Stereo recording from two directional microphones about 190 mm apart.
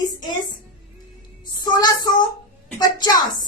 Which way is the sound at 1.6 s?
20° left (ahead or behind).